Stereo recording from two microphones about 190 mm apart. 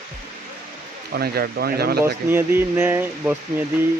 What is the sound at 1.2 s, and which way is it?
Speech, 55° right (ahead or behind).